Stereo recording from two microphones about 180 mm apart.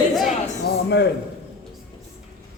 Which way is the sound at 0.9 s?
70° left (ahead or behind).